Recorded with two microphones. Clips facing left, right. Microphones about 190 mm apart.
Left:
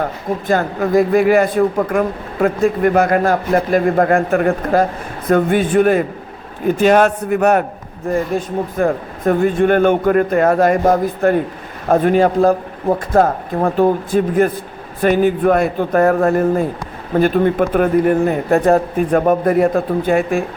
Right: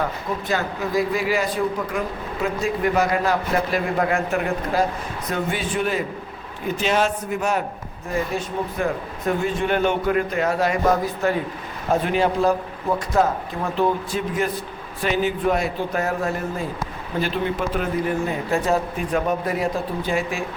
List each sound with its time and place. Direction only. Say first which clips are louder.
0.0 s a man's voice: left 5 dB; 50° left (ahead or behind)
8.1 s a man's voice: left 6 dB; 50° left (ahead or behind)